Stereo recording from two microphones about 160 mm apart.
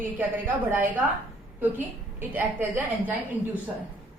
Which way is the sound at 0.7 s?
15° right (ahead or behind).